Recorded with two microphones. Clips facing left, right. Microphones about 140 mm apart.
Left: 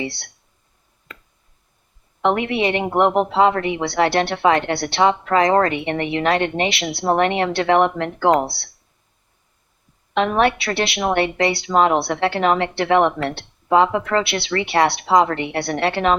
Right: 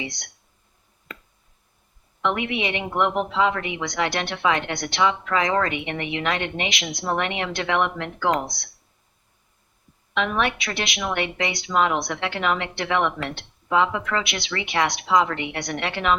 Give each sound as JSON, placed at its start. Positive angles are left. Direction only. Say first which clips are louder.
{"t": 0.0, "sound": "a woman's voice", "louder": "left 6 dB", "side_deg": 30}
{"t": 2.2, "sound": "a woman's voice", "louder": "left 6 dB", "side_deg": 40}
{"t": 10.2, "sound": "a woman's voice", "louder": "left 6 dB", "side_deg": 40}